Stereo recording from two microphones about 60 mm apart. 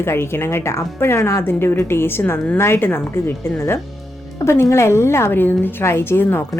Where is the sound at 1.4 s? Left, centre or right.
Left.